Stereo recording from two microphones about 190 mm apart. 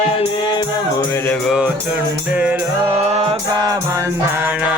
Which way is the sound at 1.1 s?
10° left (ahead or behind).